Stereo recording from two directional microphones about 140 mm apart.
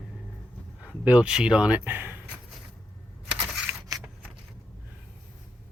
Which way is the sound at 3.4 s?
10° right (ahead or behind).